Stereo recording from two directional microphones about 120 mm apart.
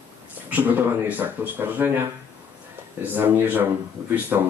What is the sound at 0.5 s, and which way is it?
Speech, 15° right (ahead or behind).